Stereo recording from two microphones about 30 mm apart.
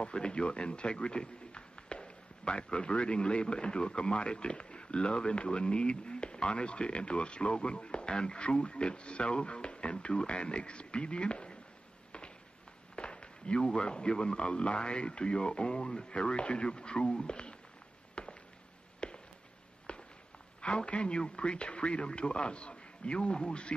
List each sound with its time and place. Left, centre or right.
0.0 s a man's voice: left
12.9 s a sound: left
13.7 s a man's voice: left
18.2 s a sound: left
18.9 s chop: left
19.9 s walk: left
20.6 s a man's voice: left